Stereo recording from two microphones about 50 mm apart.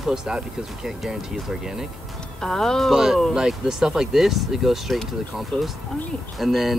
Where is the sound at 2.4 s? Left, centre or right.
Centre.